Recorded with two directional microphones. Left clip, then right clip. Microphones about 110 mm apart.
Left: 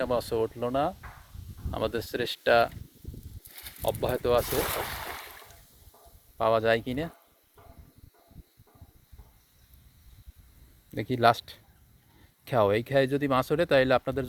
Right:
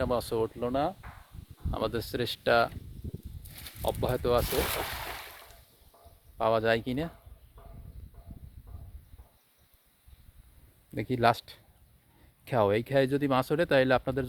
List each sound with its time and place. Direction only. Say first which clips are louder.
0.0 s speech: left 2 dB; 25° right (ahead or behind)
3.8 s speech: left 2 dB; 20° right (ahead or behind)
4.4 s boat: left 1 dB; 10° left (ahead or behind)
6.3 s speech: left 2 dB; 20° right (ahead or behind)
10.9 s speech: left 3 dB; 15° right (ahead or behind)